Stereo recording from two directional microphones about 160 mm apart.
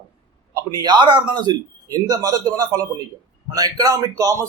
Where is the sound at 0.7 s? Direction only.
25° right (ahead or behind).